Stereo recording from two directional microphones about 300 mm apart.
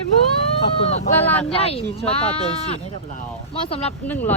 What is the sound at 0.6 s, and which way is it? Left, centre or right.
Speech, left.